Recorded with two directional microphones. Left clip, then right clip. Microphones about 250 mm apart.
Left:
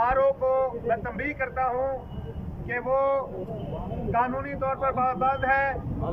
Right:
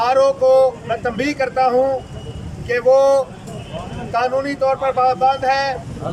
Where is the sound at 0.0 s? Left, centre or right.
Centre.